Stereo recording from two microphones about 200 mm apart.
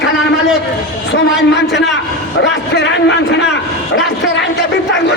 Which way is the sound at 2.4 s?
65° left (ahead or behind).